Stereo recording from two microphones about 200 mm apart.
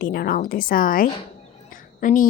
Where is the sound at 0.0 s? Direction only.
50° left (ahead or behind).